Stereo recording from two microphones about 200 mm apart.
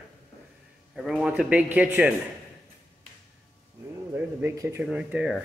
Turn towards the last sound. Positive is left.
turn(degrees=-5)  # may be behind; listen again after turning